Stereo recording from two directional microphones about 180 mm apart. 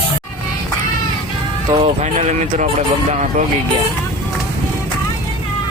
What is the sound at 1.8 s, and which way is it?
Speech, 40° right (ahead or behind).